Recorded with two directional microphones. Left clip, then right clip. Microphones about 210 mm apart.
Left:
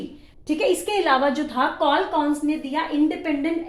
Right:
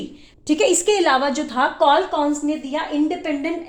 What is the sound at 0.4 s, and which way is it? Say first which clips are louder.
A woman's voice: right 5 dB; 40° right (ahead or behind).